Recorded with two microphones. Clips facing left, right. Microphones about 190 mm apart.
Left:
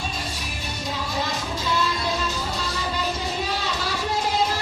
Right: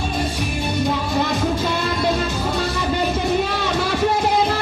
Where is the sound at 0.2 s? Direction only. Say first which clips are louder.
Right 10 dB; 60° right (ahead or behind).